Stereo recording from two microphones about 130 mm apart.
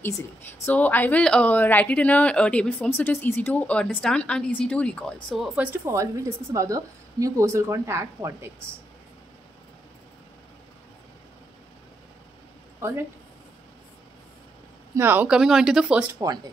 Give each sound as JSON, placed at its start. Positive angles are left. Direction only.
{"t": 0.7, "sound": "a woman's voice", "side_deg": 15}
{"t": 5.7, "sound": "a woman's voice", "side_deg": -25}
{"t": 12.8, "sound": "speech", "side_deg": -20}
{"t": 15.0, "sound": "speech", "side_deg": -15}